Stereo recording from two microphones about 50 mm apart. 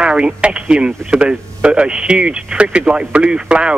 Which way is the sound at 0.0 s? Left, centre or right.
Centre.